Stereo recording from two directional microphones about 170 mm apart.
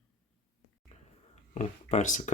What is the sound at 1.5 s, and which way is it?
Speech, 40° left (ahead or behind).